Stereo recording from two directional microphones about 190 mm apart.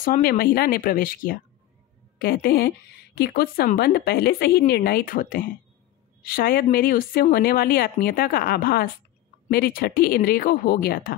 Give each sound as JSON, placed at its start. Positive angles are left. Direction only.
{"t": 0.0, "sound": "a woman's voice", "side_deg": 50}